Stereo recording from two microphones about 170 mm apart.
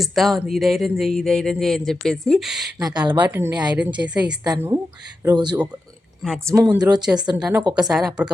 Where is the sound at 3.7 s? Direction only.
5° right (ahead or behind).